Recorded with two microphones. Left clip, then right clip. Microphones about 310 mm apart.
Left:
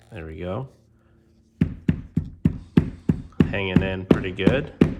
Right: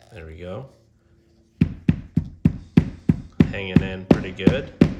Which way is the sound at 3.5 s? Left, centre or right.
Centre.